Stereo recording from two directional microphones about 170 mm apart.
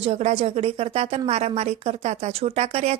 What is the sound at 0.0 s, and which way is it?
Speech, 40° right (ahead or behind).